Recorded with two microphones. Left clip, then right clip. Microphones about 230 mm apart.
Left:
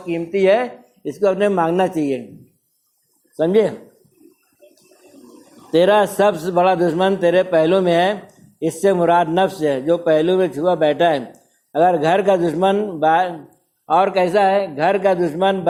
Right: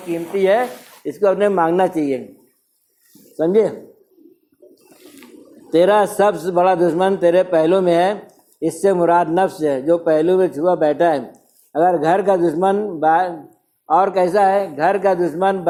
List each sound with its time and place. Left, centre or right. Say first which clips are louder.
0.1 s a man's voice: left 1 dB; left
3.3 s a man's voice: even; left
5.7 s a man's voice: even; left